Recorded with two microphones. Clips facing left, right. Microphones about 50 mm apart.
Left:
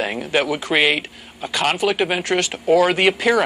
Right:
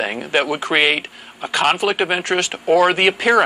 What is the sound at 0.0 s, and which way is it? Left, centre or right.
Speech, right.